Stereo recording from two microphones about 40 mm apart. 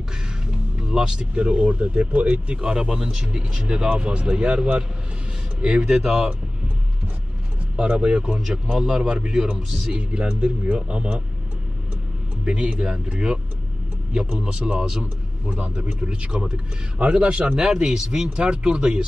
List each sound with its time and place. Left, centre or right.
0.8 s speech: centre
1.3 s speech: right
2.6 s speech: centre
7.7 s speech: right
8.7 s speech: centre
9.0 s speech: right
12.4 s a man's voice: right